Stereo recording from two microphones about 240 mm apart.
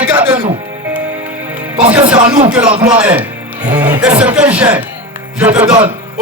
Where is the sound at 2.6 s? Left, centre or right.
Right.